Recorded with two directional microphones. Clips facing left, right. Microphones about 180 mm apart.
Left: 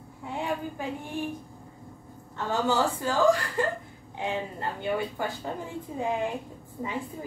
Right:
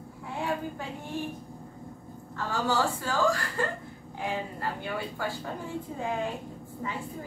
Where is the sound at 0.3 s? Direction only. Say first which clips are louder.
Left 1 dB; 20° left (ahead or behind).